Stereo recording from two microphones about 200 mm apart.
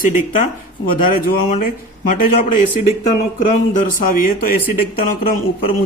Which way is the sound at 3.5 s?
40° left (ahead or behind).